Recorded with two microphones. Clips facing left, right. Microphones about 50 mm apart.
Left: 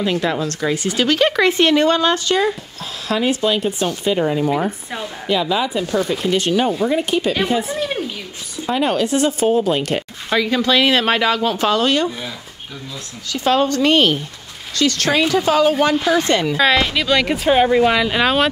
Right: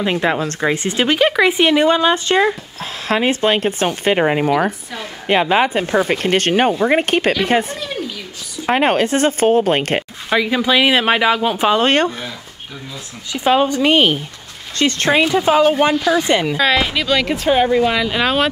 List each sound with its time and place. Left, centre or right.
0.0 s speech: right
1.2 s speech: centre
2.1 s speech: right
6.1 s speech: right
7.6 s a woman's voice: left
8.6 s speech: right
10.3 s speech: centre
11.8 s speech: right
13.3 s speech: centre
14.8 s speech: right
16.5 s speech: centre